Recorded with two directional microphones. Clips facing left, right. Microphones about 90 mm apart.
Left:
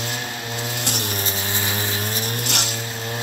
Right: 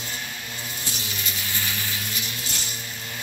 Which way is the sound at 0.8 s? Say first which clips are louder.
Left 8 dB; 60° left (ahead or behind).